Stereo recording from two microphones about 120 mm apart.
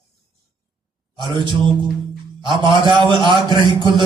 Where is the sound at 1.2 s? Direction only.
40° right (ahead or behind).